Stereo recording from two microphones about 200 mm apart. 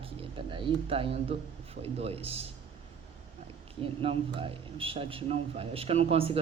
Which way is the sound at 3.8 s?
25° right (ahead or behind).